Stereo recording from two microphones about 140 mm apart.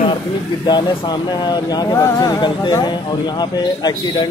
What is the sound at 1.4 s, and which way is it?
Speech, 30° left (ahead or behind).